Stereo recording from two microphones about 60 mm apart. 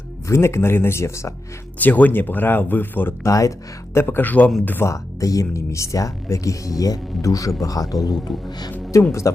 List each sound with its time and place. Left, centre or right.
0.3 s speech: left
1.8 s speech: left
3.2 s speech: left
3.9 s speech: left
4.9 s speech: left
8.9 s speech: left